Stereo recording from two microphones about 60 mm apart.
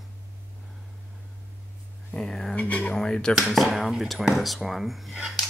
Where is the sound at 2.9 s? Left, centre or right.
Centre.